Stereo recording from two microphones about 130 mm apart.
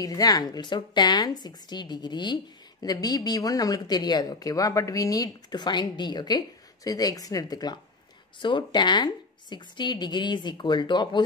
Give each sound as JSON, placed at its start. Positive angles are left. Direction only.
{"t": 0.0, "sound": "a woman's voice", "side_deg": 30}